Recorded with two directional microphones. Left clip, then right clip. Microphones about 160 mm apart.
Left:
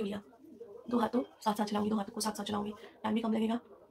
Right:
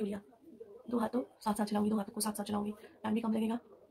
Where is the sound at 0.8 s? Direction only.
10° right (ahead or behind).